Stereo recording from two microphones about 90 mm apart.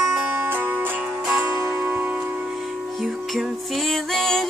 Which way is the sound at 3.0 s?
Centre (ahead or behind).